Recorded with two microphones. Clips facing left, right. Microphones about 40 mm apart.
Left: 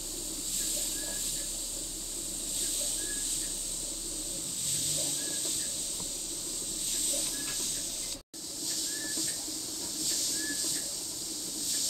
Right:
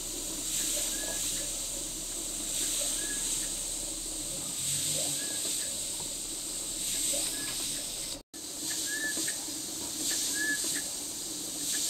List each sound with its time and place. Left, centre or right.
8.6 s bird: right